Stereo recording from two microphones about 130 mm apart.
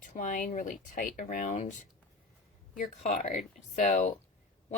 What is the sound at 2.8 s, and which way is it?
A woman's voice, 75° left (ahead or behind).